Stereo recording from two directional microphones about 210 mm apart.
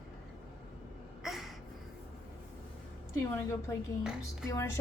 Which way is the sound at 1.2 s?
Centre (ahead or behind).